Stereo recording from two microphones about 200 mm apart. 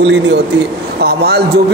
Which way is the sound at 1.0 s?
55° right (ahead or behind).